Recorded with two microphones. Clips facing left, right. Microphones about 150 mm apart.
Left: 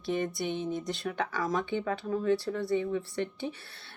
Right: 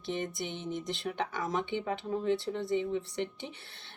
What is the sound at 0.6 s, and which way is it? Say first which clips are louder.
Speech: left 3 dB; 20° right (ahead or behind).